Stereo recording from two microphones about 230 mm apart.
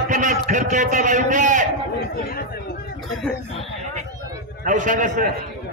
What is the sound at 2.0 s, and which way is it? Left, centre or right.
Speech, left.